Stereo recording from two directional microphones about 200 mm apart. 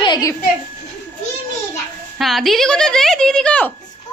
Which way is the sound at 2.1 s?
Centre (ahead or behind).